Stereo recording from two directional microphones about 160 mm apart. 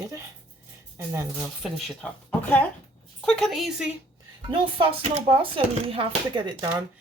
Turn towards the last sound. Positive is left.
turn(degrees=-30)  # may be behind; listen again after turning